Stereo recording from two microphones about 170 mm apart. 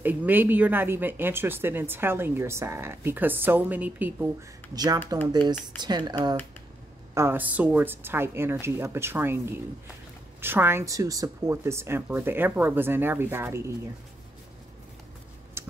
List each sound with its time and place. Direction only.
0.0 s speech: 10° right (ahead or behind)
4.7 s speech: 25° right (ahead or behind)
7.2 s speech: 10° right (ahead or behind)